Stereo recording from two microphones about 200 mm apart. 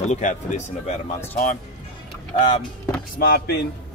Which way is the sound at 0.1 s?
40° left (ahead or behind).